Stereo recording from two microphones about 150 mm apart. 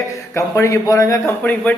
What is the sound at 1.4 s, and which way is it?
Speech, 10° left (ahead or behind).